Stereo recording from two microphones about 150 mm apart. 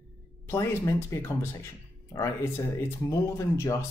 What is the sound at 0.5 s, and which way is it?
Speech, 20° left (ahead or behind).